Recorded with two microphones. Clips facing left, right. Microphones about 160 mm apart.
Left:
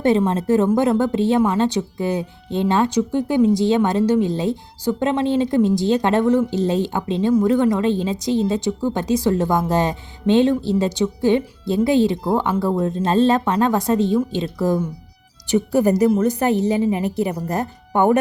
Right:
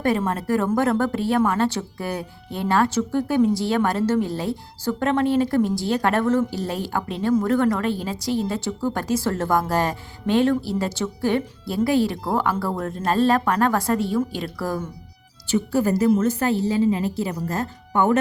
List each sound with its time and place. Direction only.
0.0 s a woman's voice: 20° left (ahead or behind)